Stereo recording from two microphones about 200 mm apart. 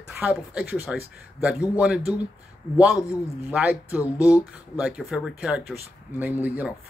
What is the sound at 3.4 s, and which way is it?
Speech, 5° right (ahead or behind).